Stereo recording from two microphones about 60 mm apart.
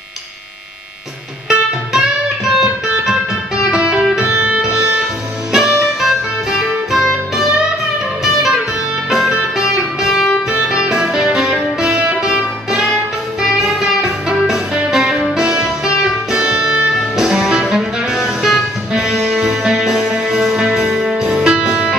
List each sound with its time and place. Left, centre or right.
1.5 s music: centre
3.7 s music: centre
4.2 s music: right; by 7.1 s centre
8.2 s music: centre
9.6 s music: centre